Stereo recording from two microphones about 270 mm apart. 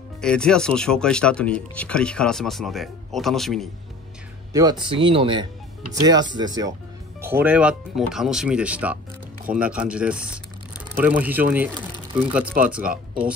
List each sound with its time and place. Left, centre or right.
0.2 s speech: centre
4.5 s speech: centre